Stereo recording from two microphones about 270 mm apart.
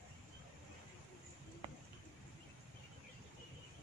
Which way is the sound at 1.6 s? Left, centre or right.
Centre.